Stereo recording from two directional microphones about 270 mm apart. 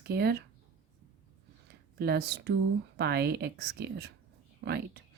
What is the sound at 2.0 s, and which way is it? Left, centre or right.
Speech, right.